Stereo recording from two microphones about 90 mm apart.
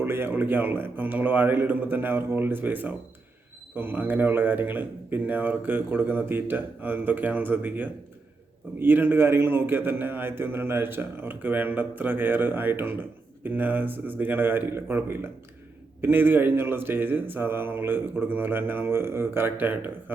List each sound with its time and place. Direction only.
0.0 s a man's voice: 25° right (ahead or behind)